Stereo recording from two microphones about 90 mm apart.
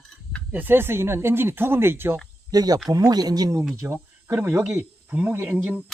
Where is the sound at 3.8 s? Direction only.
25° right (ahead or behind).